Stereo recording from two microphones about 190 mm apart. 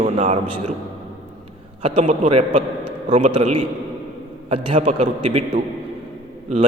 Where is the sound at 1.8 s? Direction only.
30° right (ahead or behind).